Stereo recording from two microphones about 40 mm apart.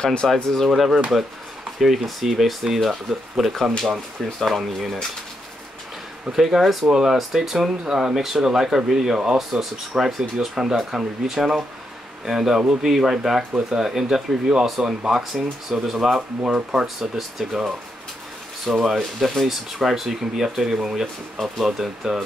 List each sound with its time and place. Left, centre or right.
0.0 s speech: centre
0.3 s speech: centre
1.8 s speech: centre
6.3 s speech: centre
6.9 s speech: centre
16.2 s speech: right
16.8 s speech: centre
18.7 s speech: centre